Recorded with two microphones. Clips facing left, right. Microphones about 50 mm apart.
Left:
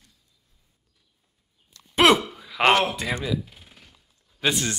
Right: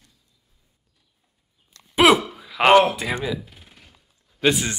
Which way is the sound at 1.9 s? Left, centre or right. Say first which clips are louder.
Right 2 dB; centre.